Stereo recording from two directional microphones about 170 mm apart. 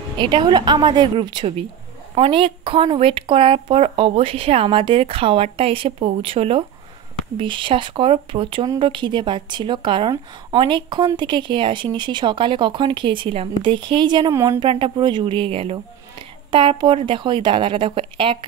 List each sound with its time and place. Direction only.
0.2 s speech: 25° right (ahead or behind)
14.7 s speech: 30° right (ahead or behind)